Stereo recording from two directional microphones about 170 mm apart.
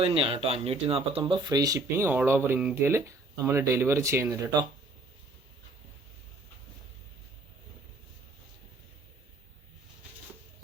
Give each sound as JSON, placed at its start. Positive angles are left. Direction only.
{"t": 0.0, "sound": "speech", "side_deg": -35}